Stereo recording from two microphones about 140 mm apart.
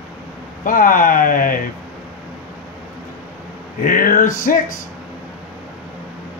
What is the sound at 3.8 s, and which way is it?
Speech, 80° left.